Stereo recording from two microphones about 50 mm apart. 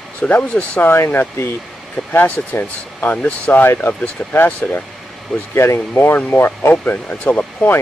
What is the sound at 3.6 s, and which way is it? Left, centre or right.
Speech, left.